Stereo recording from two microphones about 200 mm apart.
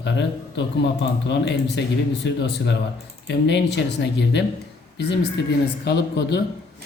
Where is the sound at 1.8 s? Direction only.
60° left (ahead or behind).